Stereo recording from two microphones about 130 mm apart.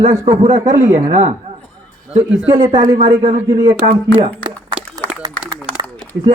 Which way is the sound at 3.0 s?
40° right (ahead or behind).